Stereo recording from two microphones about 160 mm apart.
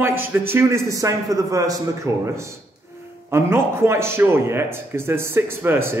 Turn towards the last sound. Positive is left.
turn(degrees=-15)  # may be behind; listen again after turning